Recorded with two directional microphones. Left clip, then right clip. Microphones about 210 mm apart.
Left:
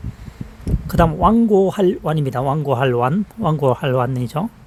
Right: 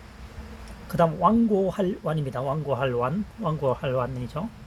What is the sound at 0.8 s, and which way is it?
Speech, 55° left (ahead or behind).